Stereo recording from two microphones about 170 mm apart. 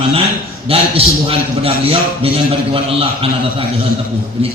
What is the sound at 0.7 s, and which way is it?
A man's voice, 35° right (ahead or behind).